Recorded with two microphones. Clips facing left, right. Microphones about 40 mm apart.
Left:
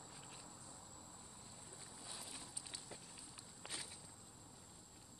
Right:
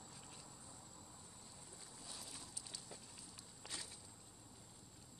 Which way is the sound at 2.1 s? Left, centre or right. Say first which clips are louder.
Left 1 dB; left.